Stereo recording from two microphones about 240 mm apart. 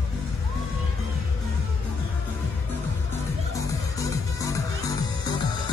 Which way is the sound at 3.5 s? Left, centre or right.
Centre.